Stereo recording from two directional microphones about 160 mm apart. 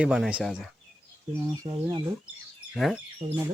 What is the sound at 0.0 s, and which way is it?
Speech, 5° right (ahead or behind).